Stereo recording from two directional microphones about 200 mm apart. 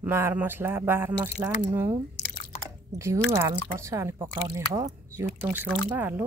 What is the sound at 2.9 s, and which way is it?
Speech, 15° right (ahead or behind).